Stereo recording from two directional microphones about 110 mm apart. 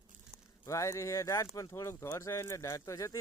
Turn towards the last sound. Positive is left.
turn(degrees=30)  # may be behind; listen again after turning